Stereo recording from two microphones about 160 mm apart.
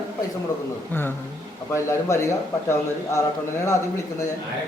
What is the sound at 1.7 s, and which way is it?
A man's voice, 20° left (ahead or behind).